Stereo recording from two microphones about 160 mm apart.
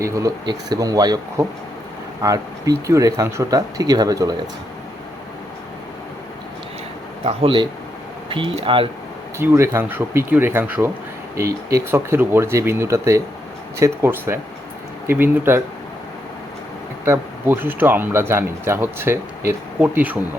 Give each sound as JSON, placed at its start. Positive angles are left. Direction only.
{"t": 0.0, "sound": "speech", "side_deg": -20}
{"t": 7.3, "sound": "speech", "side_deg": -30}
{"t": 9.4, "sound": "speech", "side_deg": -15}
{"t": 17.1, "sound": "speech", "side_deg": -15}